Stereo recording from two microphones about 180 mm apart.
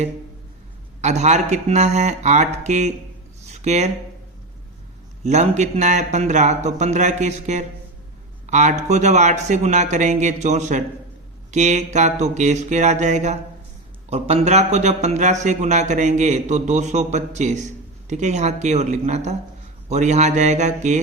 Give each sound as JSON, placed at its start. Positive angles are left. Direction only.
{"t": 1.0, "sound": "speech", "side_deg": -40}
{"t": 3.4, "sound": "a sound", "side_deg": -40}
{"t": 5.2, "sound": "speech", "side_deg": -40}